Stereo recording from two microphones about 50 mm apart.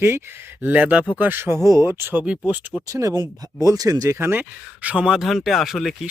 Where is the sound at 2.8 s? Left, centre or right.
Right.